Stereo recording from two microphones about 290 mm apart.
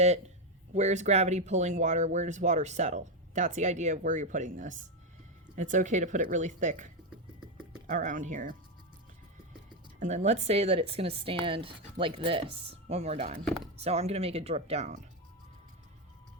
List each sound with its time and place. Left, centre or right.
0.7 s speech: right
10.0 s speech: right